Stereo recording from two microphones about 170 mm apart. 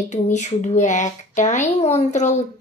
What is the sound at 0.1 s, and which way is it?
A child's voice, 45° left (ahead or behind).